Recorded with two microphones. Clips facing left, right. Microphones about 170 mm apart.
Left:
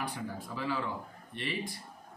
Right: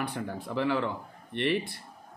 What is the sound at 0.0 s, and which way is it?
Speech, 65° right (ahead or behind).